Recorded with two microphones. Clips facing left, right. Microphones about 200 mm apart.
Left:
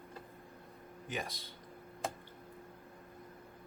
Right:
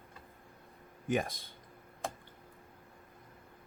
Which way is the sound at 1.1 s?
50° right (ahead or behind).